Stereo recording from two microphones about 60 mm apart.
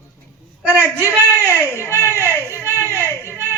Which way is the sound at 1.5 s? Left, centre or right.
Left.